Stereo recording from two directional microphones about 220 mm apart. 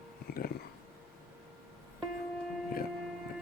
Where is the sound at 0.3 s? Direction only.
45° left (ahead or behind).